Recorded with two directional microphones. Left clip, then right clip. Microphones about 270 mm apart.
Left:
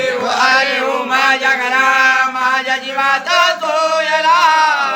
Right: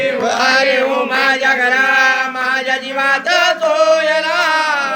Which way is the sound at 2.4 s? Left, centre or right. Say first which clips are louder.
Left 1 dB; centre.